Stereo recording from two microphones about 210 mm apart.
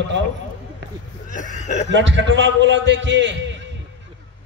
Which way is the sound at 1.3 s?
35° left (ahead or behind).